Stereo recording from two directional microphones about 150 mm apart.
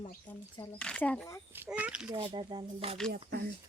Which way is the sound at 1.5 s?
10° right (ahead or behind).